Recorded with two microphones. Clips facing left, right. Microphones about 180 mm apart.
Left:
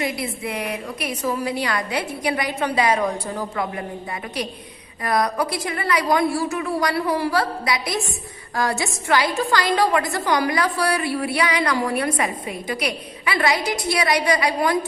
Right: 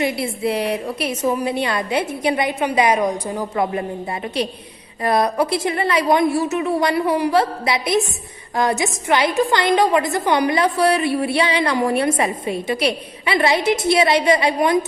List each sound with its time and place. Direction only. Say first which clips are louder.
0.0 s a woman's voice: right 5 dB; 30° right (ahead or behind)